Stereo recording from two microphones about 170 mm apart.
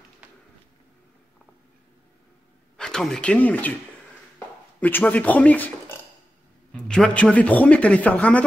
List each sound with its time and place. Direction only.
0.2 s a sound: 10° right (ahead or behind)
2.8 s speech: 5° left (ahead or behind)
4.7 s speech: 10° left (ahead or behind)